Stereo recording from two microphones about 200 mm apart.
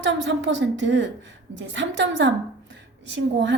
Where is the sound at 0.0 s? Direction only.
65° right (ahead or behind).